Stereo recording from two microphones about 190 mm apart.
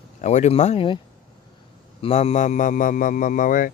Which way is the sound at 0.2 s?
35° left (ahead or behind).